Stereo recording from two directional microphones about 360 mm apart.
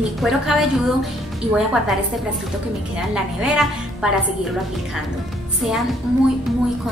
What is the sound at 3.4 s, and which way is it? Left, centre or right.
Speech, centre.